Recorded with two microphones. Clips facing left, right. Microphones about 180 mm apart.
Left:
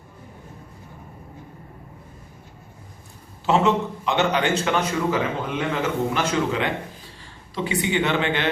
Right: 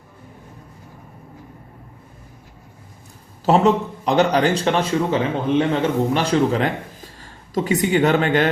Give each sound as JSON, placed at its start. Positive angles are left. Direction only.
{"t": 3.4, "sound": "speech", "side_deg": -40}